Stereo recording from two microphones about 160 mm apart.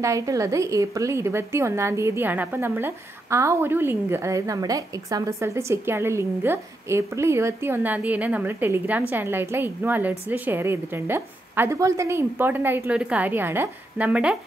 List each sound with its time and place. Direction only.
0.0 s a woman's voice: 20° right (ahead or behind)